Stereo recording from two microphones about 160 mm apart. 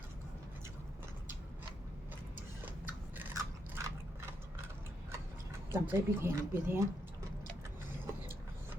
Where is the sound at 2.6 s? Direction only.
10° right (ahead or behind).